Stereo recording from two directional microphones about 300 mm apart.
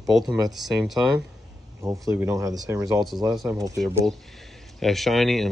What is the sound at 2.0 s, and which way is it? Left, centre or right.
Speech, centre.